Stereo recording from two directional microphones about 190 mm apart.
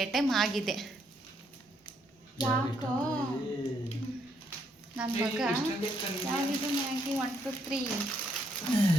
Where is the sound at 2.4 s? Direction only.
25° left (ahead or behind).